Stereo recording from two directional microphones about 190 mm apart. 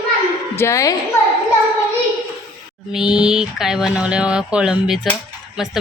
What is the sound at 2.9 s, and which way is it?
Speech, 5° right (ahead or behind).